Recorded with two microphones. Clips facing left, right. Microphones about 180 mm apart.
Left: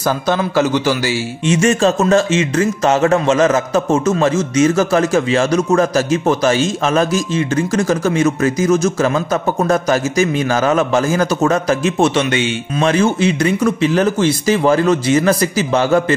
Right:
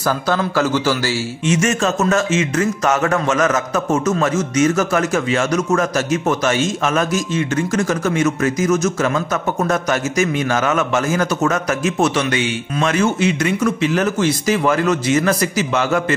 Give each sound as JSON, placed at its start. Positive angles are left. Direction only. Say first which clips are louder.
{"t": 0.0, "sound": "speech", "louder": "left 2 dB", "side_deg": 20}
{"t": 1.5, "sound": "speech", "louder": "left 4 dB", "side_deg": 30}